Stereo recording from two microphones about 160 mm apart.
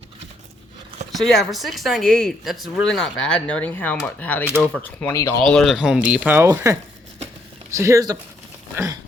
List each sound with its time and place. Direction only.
1.1 s speech: centre (ahead or behind)
4.4 s speech: 5° right (ahead or behind)
4.8 s speech: 10° left (ahead or behind); by 8.2 s 20° right (ahead or behind)
8.7 s a sound: 15° right (ahead or behind)